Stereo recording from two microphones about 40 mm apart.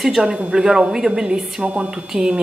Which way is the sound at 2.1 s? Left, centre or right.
Centre.